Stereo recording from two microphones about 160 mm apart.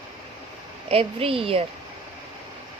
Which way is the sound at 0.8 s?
35° right (ahead or behind).